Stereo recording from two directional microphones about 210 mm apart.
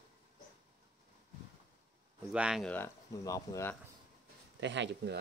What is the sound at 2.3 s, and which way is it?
Speech, 5° right (ahead or behind).